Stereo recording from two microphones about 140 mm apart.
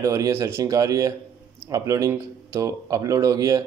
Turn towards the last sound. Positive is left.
turn(degrees=-25)  # may be behind; listen again after turning